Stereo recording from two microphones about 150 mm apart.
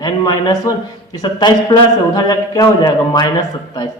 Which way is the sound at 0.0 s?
30° left (ahead or behind).